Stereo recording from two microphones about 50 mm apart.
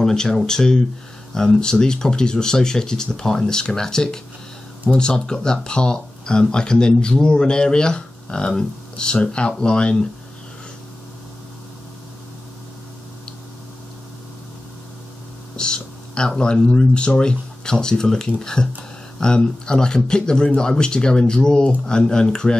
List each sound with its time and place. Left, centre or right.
0.0 s speech: centre
15.5 s speech: centre